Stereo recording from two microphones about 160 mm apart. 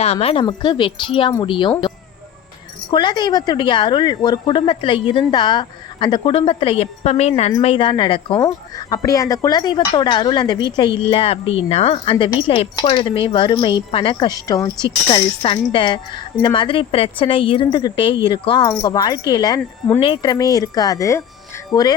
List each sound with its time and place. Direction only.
0.0 s speech: 40° left (ahead or behind)
2.9 s speech: 30° left (ahead or behind)